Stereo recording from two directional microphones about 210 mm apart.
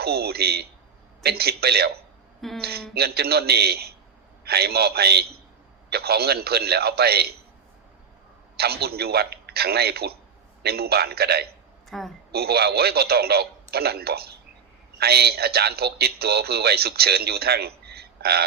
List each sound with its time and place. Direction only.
0.0 s a man's voice: 50° right (ahead or behind)
8.5 s a man's voice: 50° right (ahead or behind)
11.9 s a woman's voice: centre (ahead or behind)
12.3 s a man's voice: 50° right (ahead or behind)